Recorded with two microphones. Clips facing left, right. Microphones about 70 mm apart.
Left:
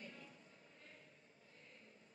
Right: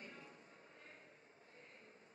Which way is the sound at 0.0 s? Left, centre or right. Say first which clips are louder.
Even; right.